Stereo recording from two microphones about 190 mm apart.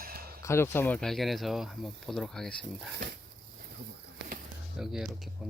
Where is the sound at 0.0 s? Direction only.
50° right (ahead or behind).